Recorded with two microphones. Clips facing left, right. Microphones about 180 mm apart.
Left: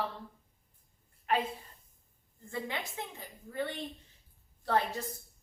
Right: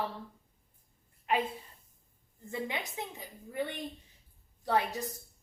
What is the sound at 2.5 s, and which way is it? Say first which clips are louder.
Speech: right 1 dB; 20° right (ahead or behind).